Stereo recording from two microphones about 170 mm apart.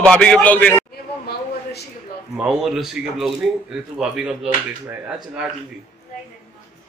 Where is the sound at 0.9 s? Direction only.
70° left (ahead or behind).